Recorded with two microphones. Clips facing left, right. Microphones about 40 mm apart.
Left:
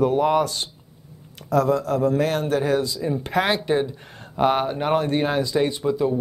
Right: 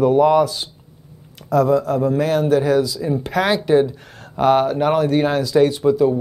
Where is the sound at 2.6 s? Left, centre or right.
Centre.